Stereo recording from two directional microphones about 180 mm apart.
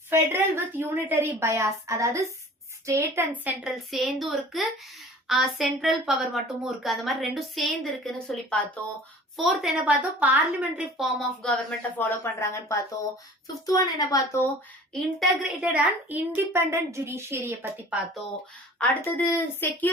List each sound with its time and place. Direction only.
0.1 s a woman's voice: 10° right (ahead or behind)
11.9 s speech: 15° left (ahead or behind)
15.2 s a woman's voice: 5° right (ahead or behind)
18.8 s speech: 10° left (ahead or behind)